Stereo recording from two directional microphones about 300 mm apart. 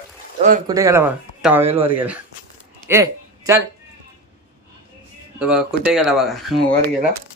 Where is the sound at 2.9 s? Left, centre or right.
Centre.